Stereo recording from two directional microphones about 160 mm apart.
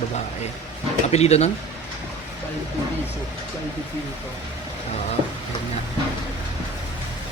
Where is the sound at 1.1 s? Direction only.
40° left (ahead or behind).